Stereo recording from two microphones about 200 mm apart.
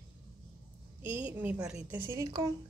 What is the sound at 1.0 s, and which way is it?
A woman's voice, 10° right (ahead or behind).